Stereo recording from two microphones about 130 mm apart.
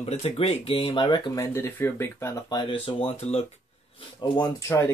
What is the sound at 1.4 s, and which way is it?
Speech, 20° left (ahead or behind).